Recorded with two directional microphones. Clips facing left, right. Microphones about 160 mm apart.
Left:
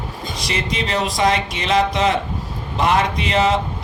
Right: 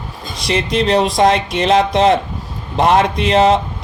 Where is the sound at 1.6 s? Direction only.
35° right (ahead or behind).